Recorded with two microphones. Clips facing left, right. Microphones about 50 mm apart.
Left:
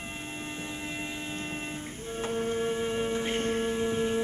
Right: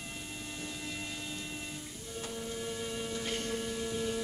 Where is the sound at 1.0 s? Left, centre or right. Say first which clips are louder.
Left 5 dB; left.